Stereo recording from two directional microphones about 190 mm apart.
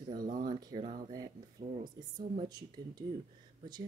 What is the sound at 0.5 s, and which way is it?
Speech, 20° right (ahead or behind).